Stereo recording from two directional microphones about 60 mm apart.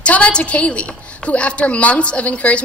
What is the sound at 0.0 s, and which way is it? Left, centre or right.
A woman's voice, left.